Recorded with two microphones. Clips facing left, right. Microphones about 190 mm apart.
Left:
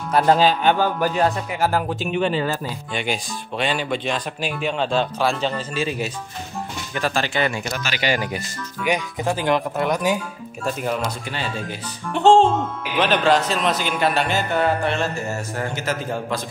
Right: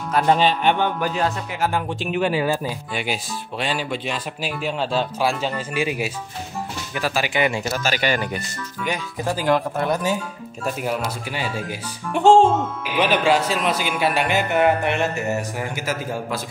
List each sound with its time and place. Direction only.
0.1 s a man's voice: 5° left (ahead or behind); by 7.5 s 15° right (ahead or behind)
7.7 s speech: 45° right (ahead or behind)
8.8 s speech: 15° left (ahead or behind)
10.6 s speech: 5° right (ahead or behind)